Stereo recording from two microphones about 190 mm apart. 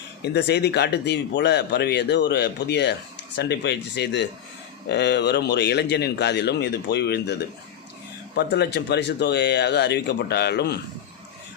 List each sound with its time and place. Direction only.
0.2 s speech: 60° left (ahead or behind)
8.4 s speech: 60° left (ahead or behind)